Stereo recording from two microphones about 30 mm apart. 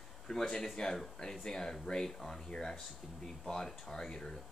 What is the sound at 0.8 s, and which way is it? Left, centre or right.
Speech, left.